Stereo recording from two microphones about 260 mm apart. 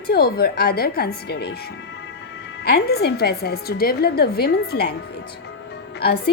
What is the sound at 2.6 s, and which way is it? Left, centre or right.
A woman's voice, left.